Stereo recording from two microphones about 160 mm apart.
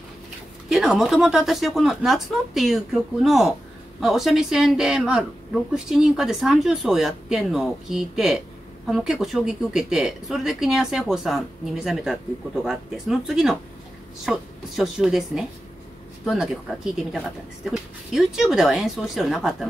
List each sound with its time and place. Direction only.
0.7 s a woman's voice: centre (ahead or behind)